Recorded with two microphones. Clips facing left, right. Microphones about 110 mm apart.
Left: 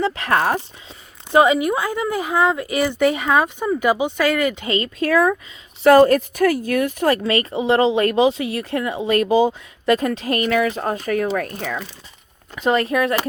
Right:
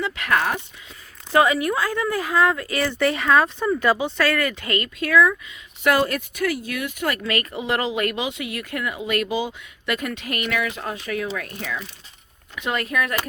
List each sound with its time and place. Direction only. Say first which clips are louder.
0.0 s a woman's voice: left 4 dB; 35° left (ahead or behind)
1.3 s a woman's voice: left 4 dB; 20° left (ahead or behind); by 11.9 s 45° left (ahead or behind)
12.5 s a woman's voice: left 6 dB; 35° left (ahead or behind)